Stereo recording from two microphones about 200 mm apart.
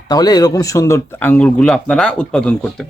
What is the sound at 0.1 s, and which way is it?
Speech, 20° left (ahead or behind).